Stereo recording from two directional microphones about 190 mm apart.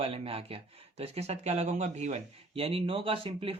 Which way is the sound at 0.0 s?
30° right (ahead or behind).